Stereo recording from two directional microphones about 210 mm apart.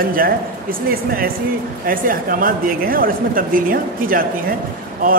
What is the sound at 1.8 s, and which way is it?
Speech, 40° right (ahead or behind).